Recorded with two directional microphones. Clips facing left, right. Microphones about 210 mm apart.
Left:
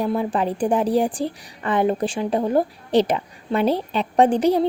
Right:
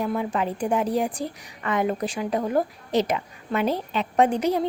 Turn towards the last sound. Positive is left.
turn(degrees=30)  # may be behind; listen again after turning